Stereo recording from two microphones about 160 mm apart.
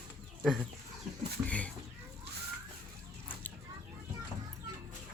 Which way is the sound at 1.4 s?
10° left (ahead or behind).